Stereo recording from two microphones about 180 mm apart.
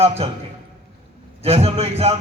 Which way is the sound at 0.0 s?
35° right (ahead or behind).